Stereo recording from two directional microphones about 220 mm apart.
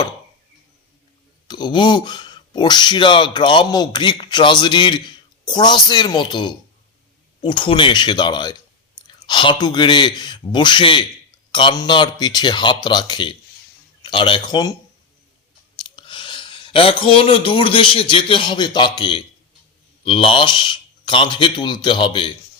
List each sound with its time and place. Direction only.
1.5 s speech: 20° left (ahead or behind)
16.0 s speech: 20° left (ahead or behind)